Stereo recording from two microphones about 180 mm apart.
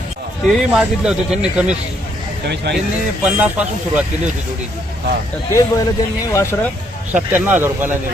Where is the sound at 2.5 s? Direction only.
70° right (ahead or behind).